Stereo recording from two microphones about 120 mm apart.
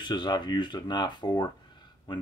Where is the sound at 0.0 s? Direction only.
40° left (ahead or behind).